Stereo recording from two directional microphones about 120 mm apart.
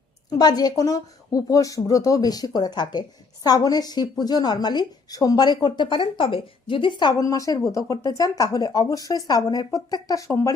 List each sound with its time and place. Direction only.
0.3 s a woman's voice: 35° left (ahead or behind)